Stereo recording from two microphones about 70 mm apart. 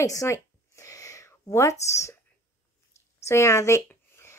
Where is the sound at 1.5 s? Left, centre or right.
Left.